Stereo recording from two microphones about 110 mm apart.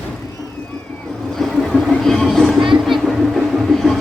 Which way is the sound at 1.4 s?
Centre (ahead or behind).